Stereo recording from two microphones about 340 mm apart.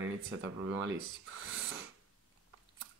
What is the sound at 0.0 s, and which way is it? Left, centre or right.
Speech, right.